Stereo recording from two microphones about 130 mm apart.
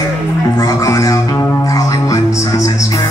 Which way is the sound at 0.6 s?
25° left (ahead or behind).